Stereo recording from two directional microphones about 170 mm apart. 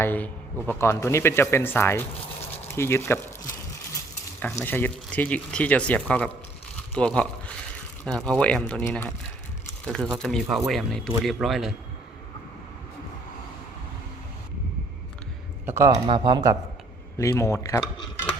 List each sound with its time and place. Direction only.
0.0 s speech: 10° left (ahead or behind)
4.4 s speech: 10° left (ahead or behind)
9.8 s speech: 5° left (ahead or behind)
15.6 s speech: 15° right (ahead or behind)
17.2 s speech: 15° left (ahead or behind)